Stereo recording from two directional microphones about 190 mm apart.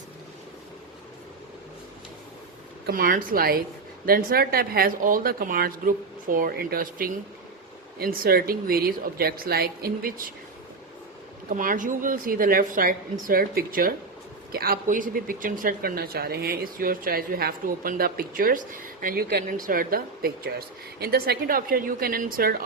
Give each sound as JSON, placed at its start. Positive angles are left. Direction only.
{"t": 2.8, "sound": "speech", "side_deg": -50}
{"t": 11.4, "sound": "speech", "side_deg": -45}